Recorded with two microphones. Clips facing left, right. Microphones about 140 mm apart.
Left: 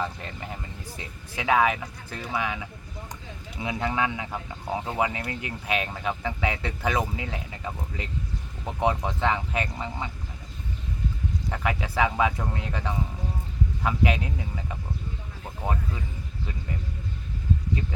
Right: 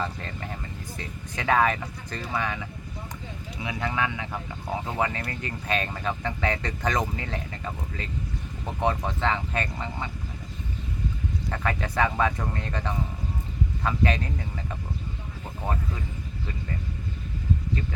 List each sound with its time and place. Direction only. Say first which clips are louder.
0.0 s speech: even; 15° left (ahead or behind)
3.6 s speech: left 2 dB; 20° left (ahead or behind)
11.5 s speech: even; 10° left (ahead or behind)